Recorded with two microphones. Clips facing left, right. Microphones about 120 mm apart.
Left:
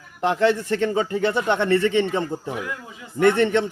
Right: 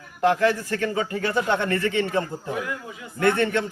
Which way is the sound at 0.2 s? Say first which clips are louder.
Left 1 dB; 20° left (ahead or behind).